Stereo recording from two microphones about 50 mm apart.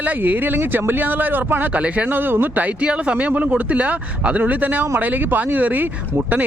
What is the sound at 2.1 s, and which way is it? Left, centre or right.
A man's voice, right.